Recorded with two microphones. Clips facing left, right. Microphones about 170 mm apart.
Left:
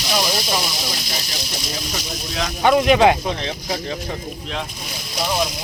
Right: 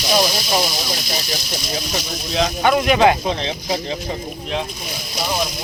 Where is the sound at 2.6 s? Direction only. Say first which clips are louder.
Left 2 dB; 25° left (ahead or behind).